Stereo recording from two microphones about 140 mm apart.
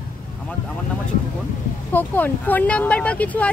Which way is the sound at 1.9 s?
15° left (ahead or behind).